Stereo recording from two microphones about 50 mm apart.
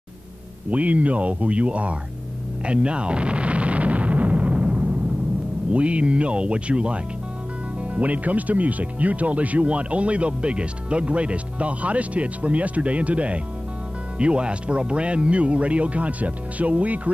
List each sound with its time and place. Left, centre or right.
0.7 s speech: right
2.6 s artillery fire: right
5.7 s speech: right